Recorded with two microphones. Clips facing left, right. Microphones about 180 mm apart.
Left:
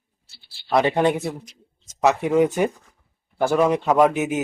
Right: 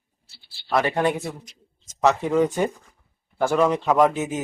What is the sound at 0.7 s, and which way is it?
Speech, 20° left (ahead or behind).